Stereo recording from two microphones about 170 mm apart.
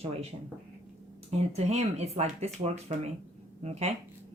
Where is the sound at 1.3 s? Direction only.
40° right (ahead or behind).